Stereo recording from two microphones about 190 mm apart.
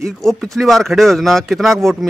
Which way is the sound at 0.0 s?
Centre (ahead or behind).